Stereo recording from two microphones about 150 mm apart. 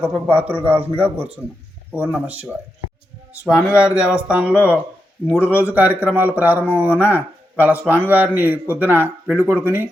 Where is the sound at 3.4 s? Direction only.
20° left (ahead or behind).